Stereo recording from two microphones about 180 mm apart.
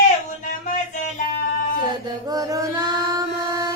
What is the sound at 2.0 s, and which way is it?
Mantra, 20° right (ahead or behind).